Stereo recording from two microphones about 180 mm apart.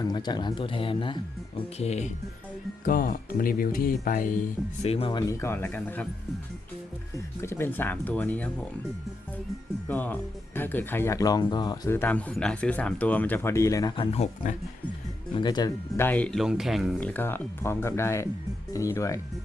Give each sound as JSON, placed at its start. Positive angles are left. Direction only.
{"t": 0.0, "sound": "speech", "side_deg": 25}
{"t": 2.8, "sound": "speech", "side_deg": 50}
{"t": 5.2, "sound": "speech", "side_deg": 15}
{"t": 7.4, "sound": "speech", "side_deg": 15}
{"t": 9.9, "sound": "speech", "side_deg": 10}
{"t": 13.9, "sound": "speech", "side_deg": 30}
{"t": 15.4, "sound": "speech", "side_deg": 25}
{"t": 16.0, "sound": "speech", "side_deg": 5}